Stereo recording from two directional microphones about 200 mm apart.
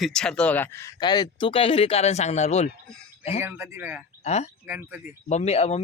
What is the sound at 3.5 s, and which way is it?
Speech, 10° right (ahead or behind).